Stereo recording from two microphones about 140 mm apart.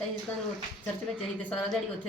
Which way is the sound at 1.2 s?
5° left (ahead or behind).